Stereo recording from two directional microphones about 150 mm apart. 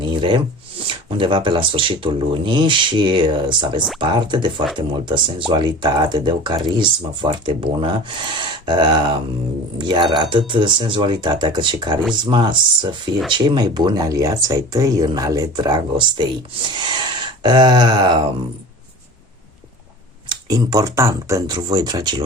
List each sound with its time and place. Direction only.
0.0 s speech: 30° right (ahead or behind)
20.3 s speech: 25° right (ahead or behind)